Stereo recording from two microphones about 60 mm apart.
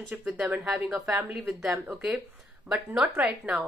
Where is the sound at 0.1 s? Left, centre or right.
Centre.